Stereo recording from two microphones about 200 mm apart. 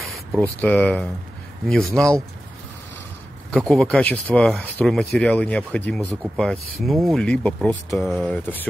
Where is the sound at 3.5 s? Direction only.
Centre (ahead or behind).